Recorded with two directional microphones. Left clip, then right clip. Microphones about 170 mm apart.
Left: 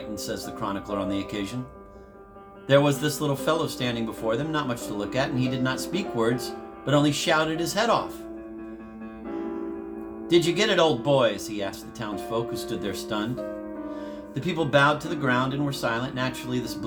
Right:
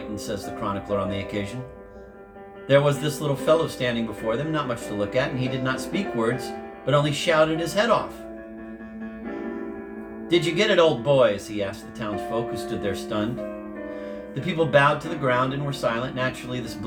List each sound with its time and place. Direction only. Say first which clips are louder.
0.6 s speech: right 3 dB; 50° left (ahead or behind)
2.6 s speech: right 1 dB; 50° left (ahead or behind)
10.2 s speech: right 1 dB; 50° left (ahead or behind)
14.4 s speech: right 2 dB; 50° left (ahead or behind)